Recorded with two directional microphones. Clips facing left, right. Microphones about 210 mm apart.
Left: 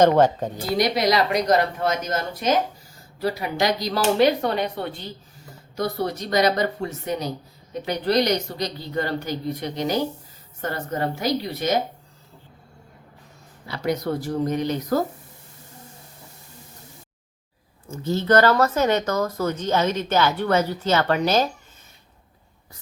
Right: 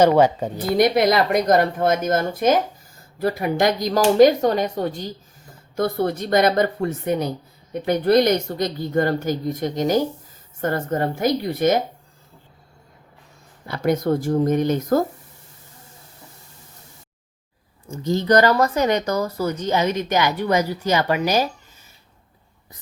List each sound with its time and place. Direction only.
0.0 s speech: 10° right (ahead or behind)
0.8 s speech: 50° right (ahead or behind)
5.7 s speech: 50° right (ahead or behind)
13.7 s speech: 50° right (ahead or behind)
17.9 s speech: 15° right (ahead or behind)